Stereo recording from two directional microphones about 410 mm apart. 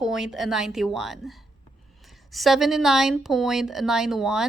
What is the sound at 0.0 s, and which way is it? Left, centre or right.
Speech, centre.